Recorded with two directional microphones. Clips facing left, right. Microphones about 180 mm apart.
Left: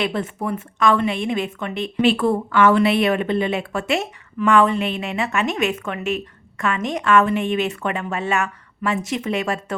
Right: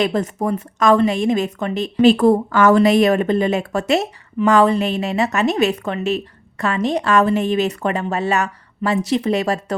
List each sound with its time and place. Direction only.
0.0 s a woman's voice: 40° right (ahead or behind)